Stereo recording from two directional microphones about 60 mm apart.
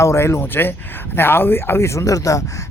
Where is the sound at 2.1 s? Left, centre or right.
Left.